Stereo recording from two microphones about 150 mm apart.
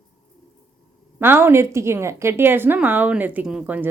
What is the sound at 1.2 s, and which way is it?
A woman's voice, 15° right (ahead or behind).